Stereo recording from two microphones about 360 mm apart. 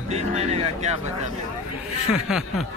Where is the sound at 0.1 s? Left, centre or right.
Centre.